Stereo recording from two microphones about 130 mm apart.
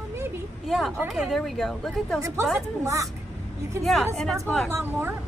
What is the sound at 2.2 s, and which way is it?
Speech, 20° right (ahead or behind).